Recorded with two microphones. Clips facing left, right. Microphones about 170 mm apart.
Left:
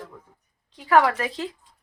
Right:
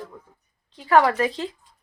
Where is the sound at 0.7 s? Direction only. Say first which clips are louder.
Right 1 dB; 10° left (ahead or behind).